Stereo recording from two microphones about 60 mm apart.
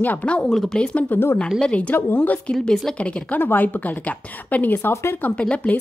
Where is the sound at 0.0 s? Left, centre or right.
Left.